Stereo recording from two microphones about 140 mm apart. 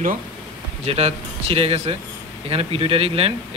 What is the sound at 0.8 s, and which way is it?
Speech, 45° right (ahead or behind).